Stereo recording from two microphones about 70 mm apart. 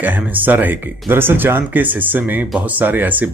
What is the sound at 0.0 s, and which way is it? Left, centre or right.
Speech, right.